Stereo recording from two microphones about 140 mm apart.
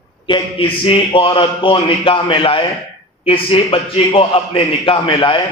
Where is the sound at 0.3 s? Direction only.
35° left (ahead or behind).